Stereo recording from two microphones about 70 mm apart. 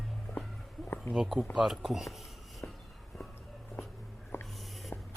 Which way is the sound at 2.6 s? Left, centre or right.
Left.